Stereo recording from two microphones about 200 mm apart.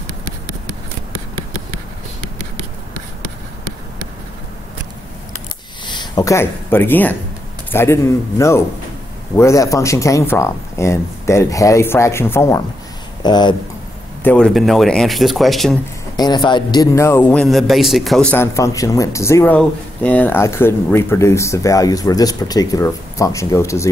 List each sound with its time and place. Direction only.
5.9 s speech: 20° left (ahead or behind)
14.2 s speech: 5° left (ahead or behind)
16.2 s speech: 20° left (ahead or behind)